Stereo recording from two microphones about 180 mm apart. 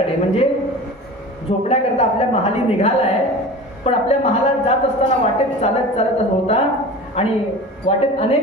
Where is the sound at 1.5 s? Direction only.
30° left (ahead or behind).